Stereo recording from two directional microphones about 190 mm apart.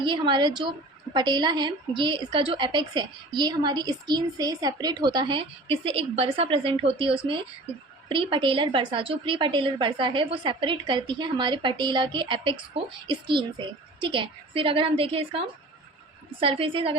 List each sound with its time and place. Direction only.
0.0 s a woman's voice: 25° right (ahead or behind)
16.4 s a woman's voice: 30° right (ahead or behind)